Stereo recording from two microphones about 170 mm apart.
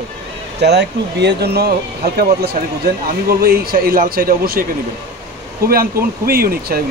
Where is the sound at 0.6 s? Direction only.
80° right; by 4.6 s 60° right (ahead or behind).